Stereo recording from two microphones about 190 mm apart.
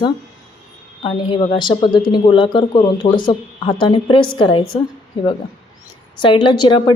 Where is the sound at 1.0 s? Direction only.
25° left (ahead or behind).